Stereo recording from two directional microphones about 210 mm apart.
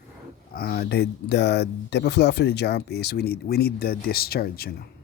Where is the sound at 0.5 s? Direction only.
45° left (ahead or behind).